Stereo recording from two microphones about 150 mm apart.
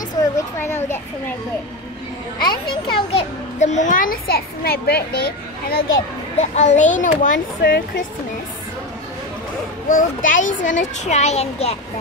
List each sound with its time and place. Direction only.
0.6 s a child's voice: 15° left (ahead or behind)
2.4 s a child's voice: 30° left (ahead or behind); by 5.9 s 90° left
6.5 s a child's voice: 50° left (ahead or behind); by 7.8 s 70° left (ahead or behind)
9.8 s a child's voice: 60° left (ahead or behind)